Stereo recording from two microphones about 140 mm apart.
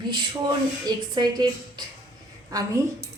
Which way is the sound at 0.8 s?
30° right (ahead or behind).